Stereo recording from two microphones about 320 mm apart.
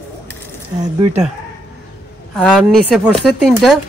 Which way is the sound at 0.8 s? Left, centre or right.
Centre.